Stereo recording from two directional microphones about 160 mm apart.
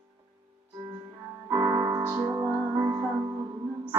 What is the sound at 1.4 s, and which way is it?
Music, 20° right (ahead or behind).